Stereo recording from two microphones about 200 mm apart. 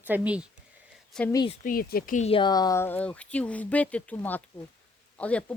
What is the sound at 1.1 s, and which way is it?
Speech, 5° left (ahead or behind).